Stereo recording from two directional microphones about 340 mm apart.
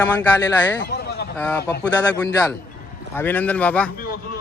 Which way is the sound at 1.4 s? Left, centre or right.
Centre.